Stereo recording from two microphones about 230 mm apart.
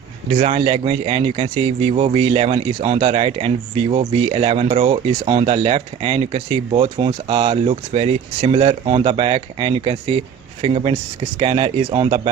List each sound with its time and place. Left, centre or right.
0.3 s speech: right